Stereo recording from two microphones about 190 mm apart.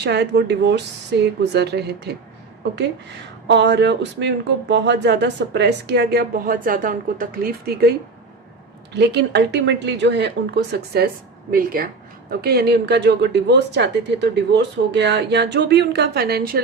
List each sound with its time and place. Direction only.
0.0 s speech: 60° right (ahead or behind)
3.4 s speech: 70° right (ahead or behind)
11.5 s speech: 50° right (ahead or behind)